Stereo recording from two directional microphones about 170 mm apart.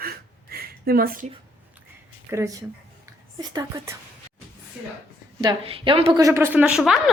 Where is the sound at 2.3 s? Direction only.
15° right (ahead or behind).